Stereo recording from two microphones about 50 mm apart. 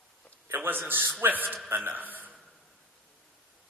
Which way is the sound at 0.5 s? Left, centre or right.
Right.